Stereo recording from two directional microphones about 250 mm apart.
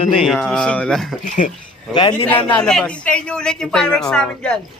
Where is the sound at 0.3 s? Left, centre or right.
Centre.